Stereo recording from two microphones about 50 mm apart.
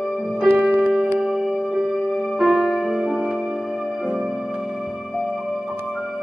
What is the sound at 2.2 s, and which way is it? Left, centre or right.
Music, centre.